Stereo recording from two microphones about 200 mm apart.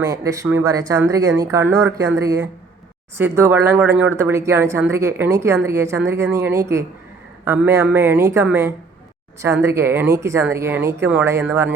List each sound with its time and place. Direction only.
0.0 s speech: 20° right (ahead or behind)